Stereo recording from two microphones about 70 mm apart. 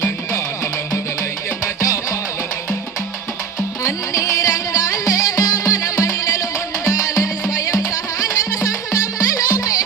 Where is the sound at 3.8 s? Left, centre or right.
Left.